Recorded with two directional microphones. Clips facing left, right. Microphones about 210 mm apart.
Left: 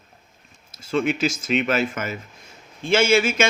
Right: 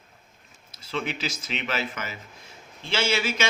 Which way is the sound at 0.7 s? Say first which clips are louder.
Left 9 dB; 45° left (ahead or behind).